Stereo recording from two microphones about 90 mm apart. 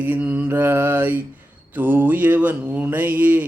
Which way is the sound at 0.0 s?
20° right (ahead or behind).